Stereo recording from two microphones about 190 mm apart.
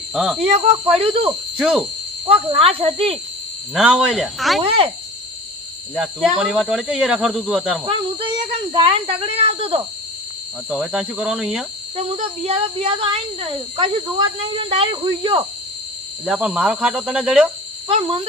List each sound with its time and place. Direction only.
0.1 s speech: 5° right (ahead or behind)
0.4 s speech: 30° right (ahead or behind)
1.5 s speech: 5° right (ahead or behind)
2.2 s speech: 30° right (ahead or behind)
3.8 s speech: 5° right (ahead or behind)
4.6 s speech: 30° right (ahead or behind)
5.9 s speech: 5° right (ahead or behind)
8.7 s speech: 30° right (ahead or behind)
10.7 s speech: 5° right (ahead or behind)
11.9 s speech: 35° right (ahead or behind)
16.2 s speech: 5° right (ahead or behind)
17.8 s speech: 25° right (ahead or behind)